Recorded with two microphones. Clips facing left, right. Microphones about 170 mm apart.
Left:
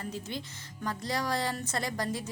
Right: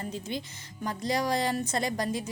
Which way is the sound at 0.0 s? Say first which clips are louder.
Right 3 dB; 15° right (ahead or behind).